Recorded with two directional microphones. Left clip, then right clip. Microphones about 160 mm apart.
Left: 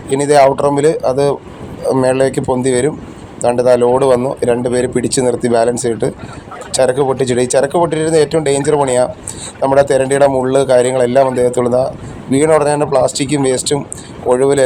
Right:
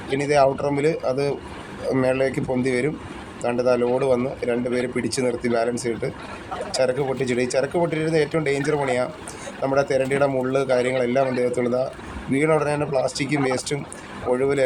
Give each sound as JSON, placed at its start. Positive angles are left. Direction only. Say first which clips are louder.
{"t": 0.1, "sound": "speech", "louder": "left 9 dB", "side_deg": 25}